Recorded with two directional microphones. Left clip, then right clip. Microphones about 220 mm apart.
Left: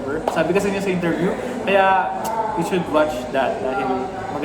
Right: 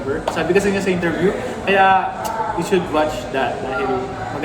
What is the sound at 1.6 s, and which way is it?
A woman's voice, 15° left (ahead or behind).